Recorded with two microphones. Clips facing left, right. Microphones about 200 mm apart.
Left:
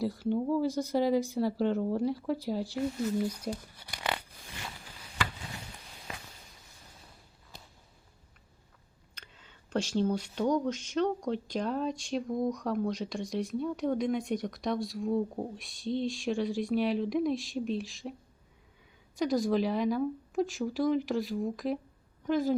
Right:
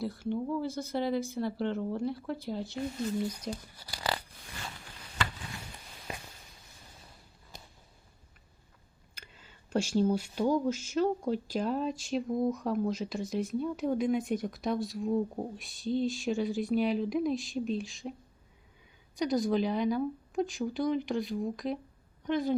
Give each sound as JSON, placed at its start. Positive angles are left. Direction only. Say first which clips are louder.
{"t": 0.0, "sound": "speech", "louder": "left 3 dB", "side_deg": 15}
{"t": 6.1, "sound": "a sound", "louder": "right 3 dB", "side_deg": -20}
{"t": 9.1, "sound": "speech", "louder": "right 1 dB", "side_deg": -10}
{"t": 19.1, "sound": "a woman's voice", "louder": "left 1 dB", "side_deg": 0}